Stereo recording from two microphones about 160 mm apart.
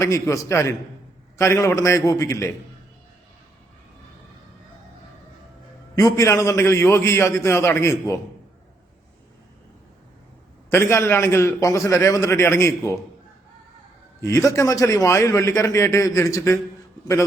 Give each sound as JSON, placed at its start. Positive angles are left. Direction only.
{"t": 0.0, "sound": "a man's voice", "side_deg": 20}
{"t": 6.0, "sound": "a man's voice", "side_deg": 20}
{"t": 10.7, "sound": "a man's voice", "side_deg": 15}
{"t": 14.2, "sound": "a man's voice", "side_deg": 20}